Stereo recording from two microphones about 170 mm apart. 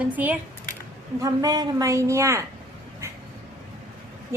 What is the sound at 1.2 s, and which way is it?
A woman's voice, 20° right (ahead or behind).